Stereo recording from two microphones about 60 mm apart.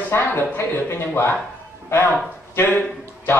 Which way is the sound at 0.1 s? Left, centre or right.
Left.